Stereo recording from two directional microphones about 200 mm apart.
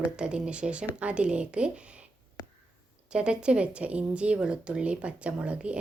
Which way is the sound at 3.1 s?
5° right (ahead or behind).